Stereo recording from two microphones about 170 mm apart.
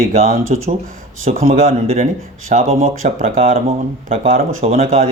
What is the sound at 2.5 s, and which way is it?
Speech, 50° right (ahead or behind).